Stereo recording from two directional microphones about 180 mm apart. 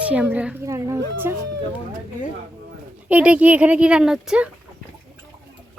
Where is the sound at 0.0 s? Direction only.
5° right (ahead or behind).